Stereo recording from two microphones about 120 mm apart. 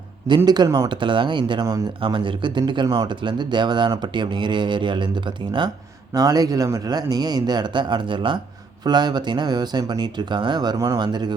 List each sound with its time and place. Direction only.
0.3 s speech: 35° right (ahead or behind)